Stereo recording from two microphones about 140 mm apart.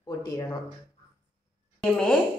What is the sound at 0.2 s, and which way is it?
Speech, 25° left (ahead or behind).